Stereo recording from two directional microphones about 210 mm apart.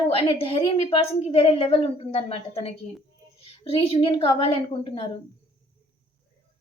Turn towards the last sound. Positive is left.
turn(degrees=25)  # may be behind; listen again after turning